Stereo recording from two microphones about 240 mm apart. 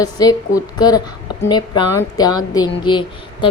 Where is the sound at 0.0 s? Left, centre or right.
Centre.